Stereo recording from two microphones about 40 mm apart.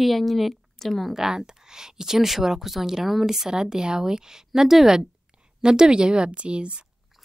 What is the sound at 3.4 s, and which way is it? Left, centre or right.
Speech, centre.